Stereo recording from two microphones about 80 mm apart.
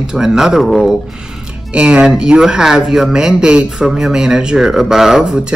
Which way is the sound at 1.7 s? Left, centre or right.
Centre.